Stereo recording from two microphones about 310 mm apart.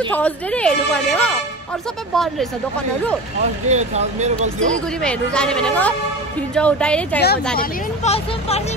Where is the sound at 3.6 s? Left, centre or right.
Right.